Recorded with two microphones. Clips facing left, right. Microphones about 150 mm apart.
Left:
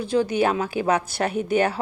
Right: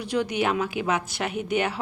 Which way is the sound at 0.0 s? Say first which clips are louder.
Left 4 dB; 30° left (ahead or behind).